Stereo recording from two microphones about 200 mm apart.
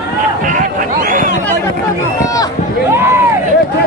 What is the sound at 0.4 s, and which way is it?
Speech, 40° right (ahead or behind).